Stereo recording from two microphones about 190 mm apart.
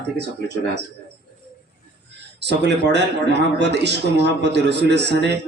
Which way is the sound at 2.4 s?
65° right (ahead or behind).